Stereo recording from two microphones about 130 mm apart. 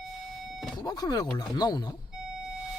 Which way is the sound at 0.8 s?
30° left (ahead or behind).